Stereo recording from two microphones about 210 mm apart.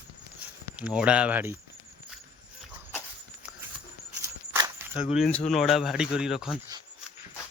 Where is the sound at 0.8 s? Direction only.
5° right (ahead or behind).